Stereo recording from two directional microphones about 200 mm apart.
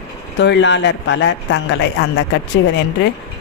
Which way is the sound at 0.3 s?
60° left (ahead or behind).